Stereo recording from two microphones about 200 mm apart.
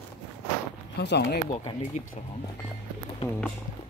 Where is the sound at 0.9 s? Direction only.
55° left (ahead or behind).